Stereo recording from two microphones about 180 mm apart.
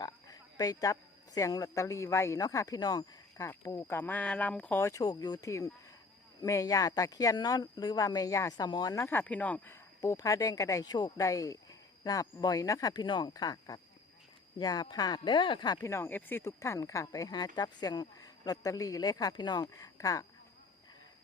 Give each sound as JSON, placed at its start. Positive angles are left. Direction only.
{"t": 0.0, "sound": "speech", "side_deg": 20}